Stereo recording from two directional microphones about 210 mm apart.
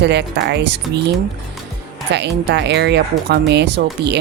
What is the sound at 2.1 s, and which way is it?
Speech, 55° right (ahead or behind).